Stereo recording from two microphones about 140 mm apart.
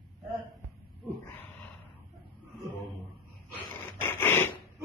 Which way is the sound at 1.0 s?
15° left (ahead or behind).